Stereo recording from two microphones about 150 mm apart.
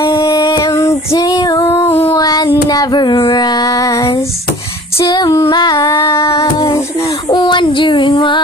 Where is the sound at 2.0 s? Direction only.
25° left (ahead or behind).